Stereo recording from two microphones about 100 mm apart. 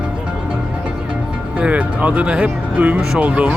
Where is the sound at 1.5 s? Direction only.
15° right (ahead or behind).